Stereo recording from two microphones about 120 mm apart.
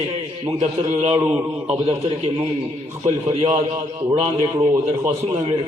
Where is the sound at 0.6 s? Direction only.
70° right (ahead or behind).